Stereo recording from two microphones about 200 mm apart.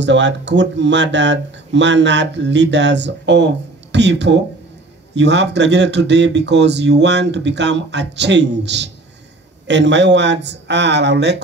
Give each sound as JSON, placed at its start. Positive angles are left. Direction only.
{"t": 0.0, "sound": "speech", "side_deg": -65}